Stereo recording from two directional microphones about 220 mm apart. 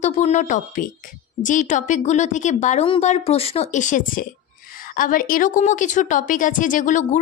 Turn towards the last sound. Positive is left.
turn(degrees=35)  # may be behind; listen again after turning